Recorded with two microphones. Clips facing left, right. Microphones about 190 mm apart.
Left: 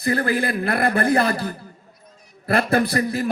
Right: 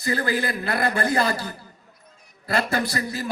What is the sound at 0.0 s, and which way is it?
A man's voice, 55° left (ahead or behind).